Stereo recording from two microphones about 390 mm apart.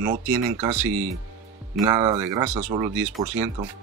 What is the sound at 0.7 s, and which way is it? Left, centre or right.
Speech, centre.